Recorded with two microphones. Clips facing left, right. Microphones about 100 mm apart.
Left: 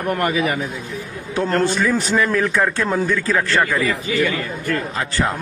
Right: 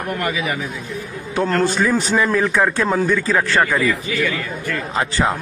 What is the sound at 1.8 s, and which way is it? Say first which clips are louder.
Speech: right 1 dB; 20° right (ahead or behind).